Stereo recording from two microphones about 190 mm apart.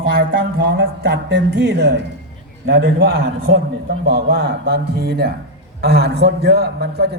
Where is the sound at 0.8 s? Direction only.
60° right (ahead or behind).